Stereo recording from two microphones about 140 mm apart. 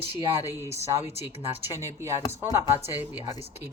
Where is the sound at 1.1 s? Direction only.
50° left (ahead or behind).